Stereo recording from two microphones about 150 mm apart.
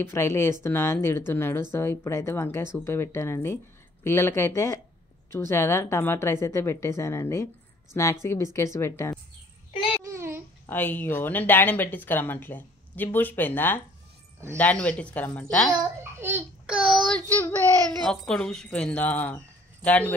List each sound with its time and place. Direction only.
0.0 s speech: 20° left (ahead or behind)
10.1 s babbling: 15° right (ahead or behind)
10.7 s speech: 10° left (ahead or behind)
15.8 s babbling: 15° right (ahead or behind)
16.8 s child singing: centre (ahead or behind)
18.0 s speech: 5° left (ahead or behind)